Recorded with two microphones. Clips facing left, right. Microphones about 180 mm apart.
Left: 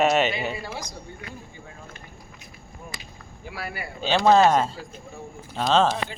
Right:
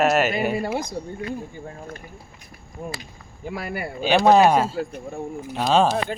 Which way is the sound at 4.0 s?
15° right (ahead or behind).